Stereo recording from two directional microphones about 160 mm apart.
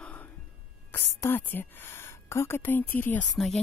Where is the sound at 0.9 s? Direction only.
15° left (ahead or behind).